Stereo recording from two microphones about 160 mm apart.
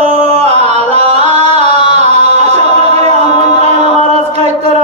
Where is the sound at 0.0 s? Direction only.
40° right (ahead or behind).